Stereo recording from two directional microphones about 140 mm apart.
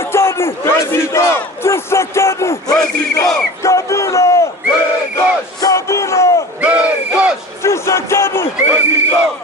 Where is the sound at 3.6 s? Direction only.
20° left (ahead or behind).